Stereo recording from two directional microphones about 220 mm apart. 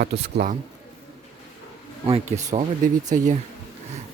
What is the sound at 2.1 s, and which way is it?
Speech, 25° right (ahead or behind).